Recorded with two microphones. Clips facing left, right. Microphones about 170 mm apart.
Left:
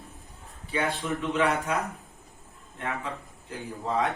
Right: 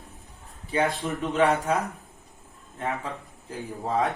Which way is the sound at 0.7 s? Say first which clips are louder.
Right 3 dB; 40° right (ahead or behind).